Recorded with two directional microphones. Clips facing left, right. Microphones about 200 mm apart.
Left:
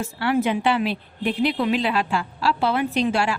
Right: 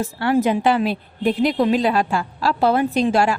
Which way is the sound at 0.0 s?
40° right (ahead or behind).